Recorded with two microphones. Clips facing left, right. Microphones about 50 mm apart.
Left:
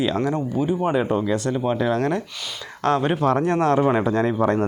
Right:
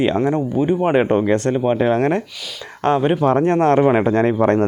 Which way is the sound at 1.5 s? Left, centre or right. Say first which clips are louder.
Right 5 dB; right.